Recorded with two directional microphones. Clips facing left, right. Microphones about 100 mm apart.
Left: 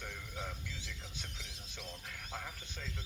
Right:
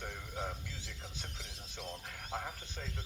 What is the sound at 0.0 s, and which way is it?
Squeal, 35° right (ahead or behind).